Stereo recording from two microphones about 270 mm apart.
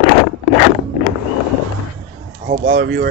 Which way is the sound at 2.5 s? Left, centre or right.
Right.